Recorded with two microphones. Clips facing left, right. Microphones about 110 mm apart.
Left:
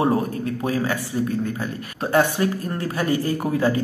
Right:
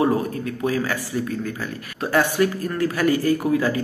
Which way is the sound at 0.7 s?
30° left (ahead or behind).